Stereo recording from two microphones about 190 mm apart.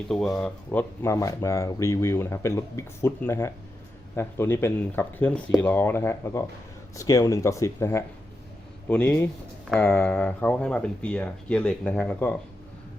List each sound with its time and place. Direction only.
0.1 s speech: 5° left (ahead or behind)